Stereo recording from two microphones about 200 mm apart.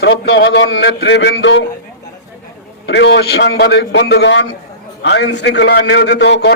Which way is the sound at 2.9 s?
60° left (ahead or behind).